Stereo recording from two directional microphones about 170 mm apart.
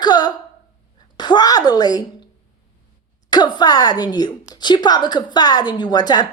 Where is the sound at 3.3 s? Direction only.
25° left (ahead or behind).